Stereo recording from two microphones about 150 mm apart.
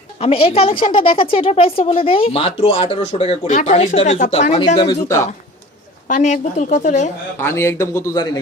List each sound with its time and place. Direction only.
0.2 s a woman's voice: 40° left (ahead or behind)
3.5 s speech: 50° left (ahead or behind)
4.8 s speech: 20° left (ahead or behind)
6.1 s speech: 55° left (ahead or behind)
7.3 s a man's voice: 15° left (ahead or behind)